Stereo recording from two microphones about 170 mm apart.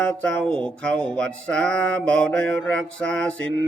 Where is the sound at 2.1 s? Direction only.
5° left (ahead or behind).